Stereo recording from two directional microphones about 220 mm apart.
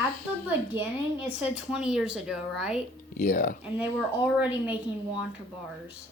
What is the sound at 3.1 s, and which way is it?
Speech, 35° left (ahead or behind).